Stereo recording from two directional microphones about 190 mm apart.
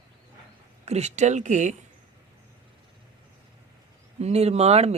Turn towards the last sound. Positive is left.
turn(degrees=-35)  # may be behind; listen again after turning